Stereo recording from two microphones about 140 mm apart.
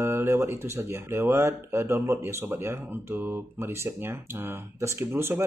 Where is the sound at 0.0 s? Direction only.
20° right (ahead or behind).